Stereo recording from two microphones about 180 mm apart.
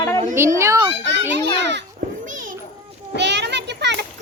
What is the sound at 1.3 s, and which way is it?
Speech, 75° right (ahead or behind).